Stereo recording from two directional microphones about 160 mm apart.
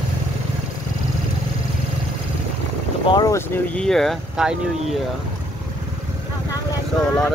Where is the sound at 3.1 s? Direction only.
25° left (ahead or behind).